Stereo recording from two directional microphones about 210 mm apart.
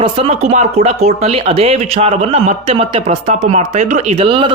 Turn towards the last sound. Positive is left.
turn(degrees=-25)  # may be behind; listen again after turning